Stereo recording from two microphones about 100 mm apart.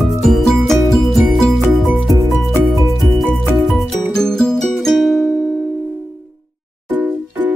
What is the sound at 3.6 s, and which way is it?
Music, centre (ahead or behind).